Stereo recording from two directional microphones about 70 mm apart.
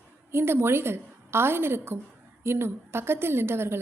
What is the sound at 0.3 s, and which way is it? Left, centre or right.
A woman's voice, right.